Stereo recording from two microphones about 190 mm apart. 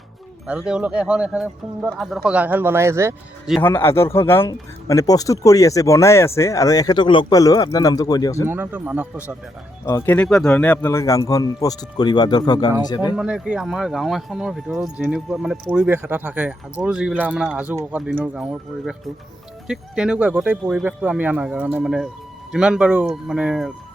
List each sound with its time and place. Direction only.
0.4 s speech: 5° right (ahead or behind)
3.6 s speech: 10° left (ahead or behind)
8.4 s speech: 10° right (ahead or behind)
9.8 s speech: 15° left (ahead or behind)
13.1 s speech: 5° right (ahead or behind)